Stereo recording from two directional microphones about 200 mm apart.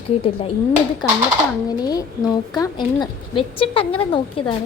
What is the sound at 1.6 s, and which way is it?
Speech, 20° left (ahead or behind).